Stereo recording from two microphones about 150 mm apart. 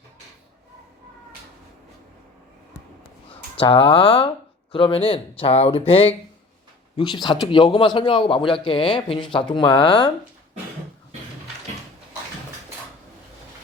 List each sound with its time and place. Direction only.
3.5 s speech: 35° left (ahead or behind)
6.9 s speech: 30° left (ahead or behind)